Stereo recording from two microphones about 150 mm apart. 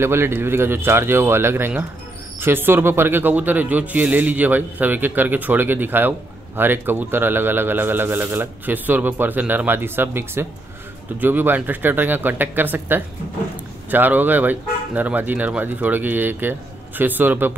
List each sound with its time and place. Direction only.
0.0 s a man's voice: 15° right (ahead or behind)